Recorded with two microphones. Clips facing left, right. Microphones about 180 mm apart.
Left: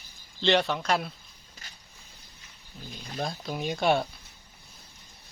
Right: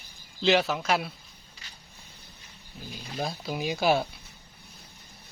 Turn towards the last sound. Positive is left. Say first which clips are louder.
# even
turn(degrees=0)  # may be behind; listen again after turning